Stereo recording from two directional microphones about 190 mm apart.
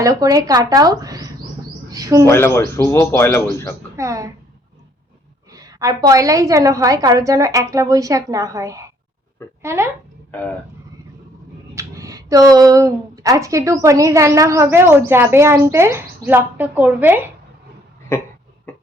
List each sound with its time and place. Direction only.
0.0 s speech: 15° right (ahead or behind)
2.2 s a man's voice: 15° left (ahead or behind)
3.9 s speech: 15° right (ahead or behind)
5.5 s speech: 20° right (ahead or behind)
11.7 s speech: 15° right (ahead or behind)